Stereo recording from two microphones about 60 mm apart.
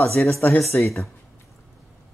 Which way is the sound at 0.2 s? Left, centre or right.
Left.